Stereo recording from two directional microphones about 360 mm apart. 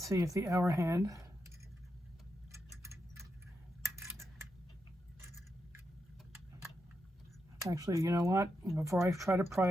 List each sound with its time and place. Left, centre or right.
0.0 s speech: centre
2.5 s clock: centre
3.8 s coin: centre
7.6 s speech: centre